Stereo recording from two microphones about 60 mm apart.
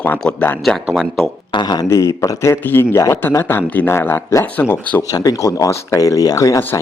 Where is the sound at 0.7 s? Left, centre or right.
Centre.